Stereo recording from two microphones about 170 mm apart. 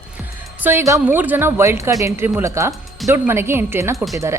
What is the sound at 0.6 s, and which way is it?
A woman's voice, 15° right (ahead or behind).